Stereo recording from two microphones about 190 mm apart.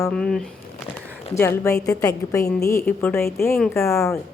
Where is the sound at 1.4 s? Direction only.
15° left (ahead or behind).